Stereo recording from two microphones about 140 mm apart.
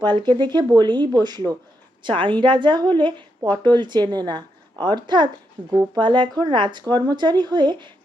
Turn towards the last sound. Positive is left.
turn(degrees=-35)  # may be behind; listen again after turning